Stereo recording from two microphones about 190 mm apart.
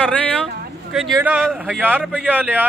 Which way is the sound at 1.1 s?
10° right (ahead or behind).